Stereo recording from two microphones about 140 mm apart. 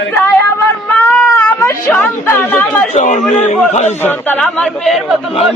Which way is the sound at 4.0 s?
15° left (ahead or behind).